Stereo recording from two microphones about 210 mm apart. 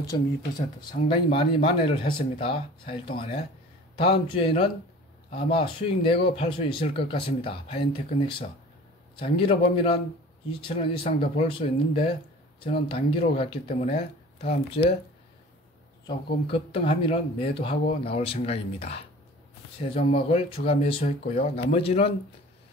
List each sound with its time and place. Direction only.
0.1 s speech: 20° left (ahead or behind)
16.1 s speech: 25° left (ahead or behind)